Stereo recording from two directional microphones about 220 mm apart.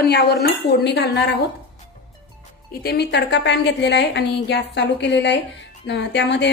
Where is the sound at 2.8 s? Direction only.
50° left (ahead or behind).